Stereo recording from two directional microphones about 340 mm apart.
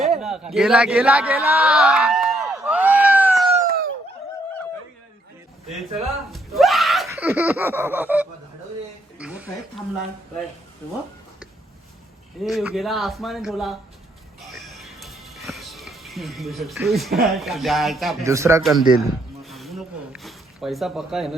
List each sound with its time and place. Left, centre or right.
0.0 s a sound: centre
3.5 s a sound: right
6.0 s speech: centre
12.4 s speech: centre
14.4 s music: centre
17.2 s speech: centre